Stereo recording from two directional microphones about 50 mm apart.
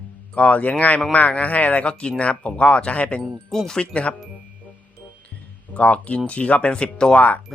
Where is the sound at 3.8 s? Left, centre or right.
Left.